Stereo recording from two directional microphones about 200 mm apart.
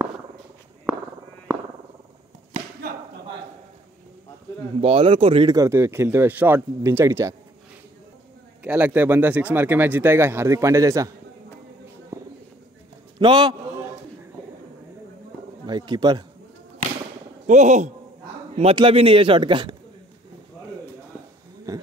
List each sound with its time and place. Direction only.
4.7 s speech: 30° right (ahead or behind)
8.6 s speech: 10° right (ahead or behind)
12.1 s a sound: 15° right (ahead or behind)
13.2 s speech: 20° right (ahead or behind)
15.6 s speech: 20° right (ahead or behind)
17.5 s speech: 35° right (ahead or behind)
21.7 s speech: 15° right (ahead or behind)